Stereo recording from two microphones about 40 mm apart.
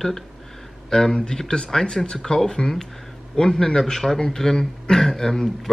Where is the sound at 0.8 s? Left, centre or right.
Centre.